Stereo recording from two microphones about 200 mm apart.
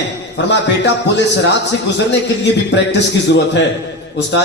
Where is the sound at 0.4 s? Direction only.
60° left (ahead or behind).